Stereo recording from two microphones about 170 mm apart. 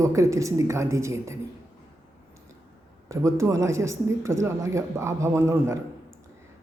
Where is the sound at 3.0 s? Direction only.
15° right (ahead or behind).